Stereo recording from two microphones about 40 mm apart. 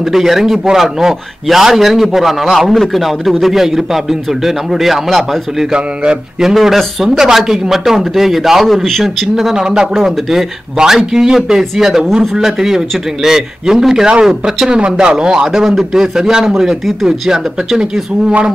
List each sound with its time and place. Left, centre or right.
0.0 s a man's voice: centre
9.3 s a man's voice: centre
15.4 s a man's voice: centre